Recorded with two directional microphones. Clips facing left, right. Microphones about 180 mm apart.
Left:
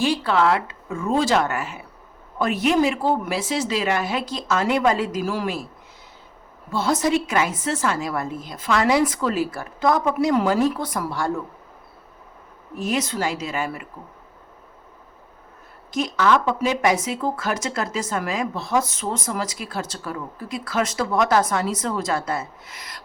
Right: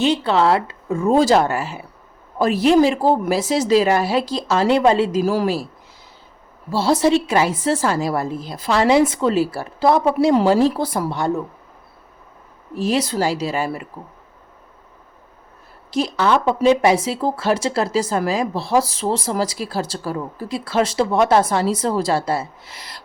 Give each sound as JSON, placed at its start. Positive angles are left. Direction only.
{"t": 0.0, "sound": "speech", "side_deg": -25}
{"t": 6.7, "sound": "speech", "side_deg": -30}
{"t": 12.7, "sound": "speech", "side_deg": -30}
{"t": 15.9, "sound": "speech", "side_deg": -30}